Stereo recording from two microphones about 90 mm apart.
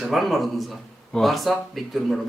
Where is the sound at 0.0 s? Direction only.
Centre (ahead or behind).